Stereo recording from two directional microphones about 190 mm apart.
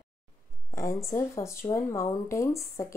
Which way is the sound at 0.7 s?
15° left (ahead or behind).